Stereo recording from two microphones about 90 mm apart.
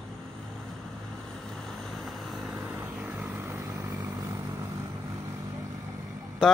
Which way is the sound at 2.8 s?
20° right (ahead or behind).